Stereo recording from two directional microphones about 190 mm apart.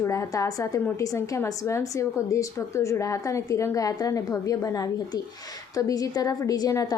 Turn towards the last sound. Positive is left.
turn(degrees=20)  # may be behind; listen again after turning